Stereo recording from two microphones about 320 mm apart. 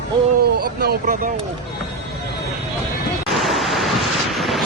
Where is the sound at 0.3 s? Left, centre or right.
Right.